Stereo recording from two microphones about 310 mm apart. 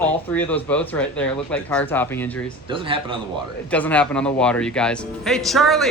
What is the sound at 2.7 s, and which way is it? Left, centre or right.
Speech, centre.